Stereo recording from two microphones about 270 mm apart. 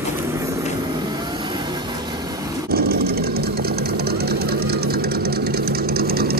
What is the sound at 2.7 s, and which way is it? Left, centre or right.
Sewing machine, right.